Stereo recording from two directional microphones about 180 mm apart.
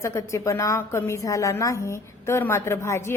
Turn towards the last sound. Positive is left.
turn(degrees=15)  # may be behind; listen again after turning